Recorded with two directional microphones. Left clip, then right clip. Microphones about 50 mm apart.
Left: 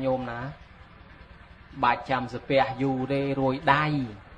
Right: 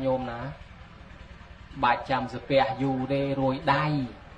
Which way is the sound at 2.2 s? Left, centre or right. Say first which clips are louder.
Even; left.